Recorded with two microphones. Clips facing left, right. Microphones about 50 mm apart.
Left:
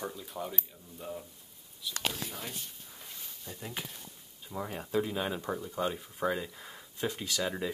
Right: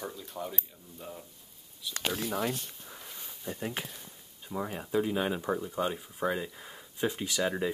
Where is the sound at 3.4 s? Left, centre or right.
Right.